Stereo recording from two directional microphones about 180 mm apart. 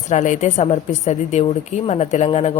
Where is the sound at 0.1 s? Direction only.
45° left (ahead or behind).